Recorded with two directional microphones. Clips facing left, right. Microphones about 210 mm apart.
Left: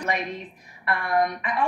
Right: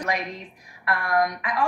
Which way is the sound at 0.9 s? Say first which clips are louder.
Even; 5° left (ahead or behind).